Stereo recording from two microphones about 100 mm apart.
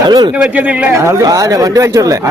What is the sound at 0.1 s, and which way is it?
Speech, 45° right (ahead or behind).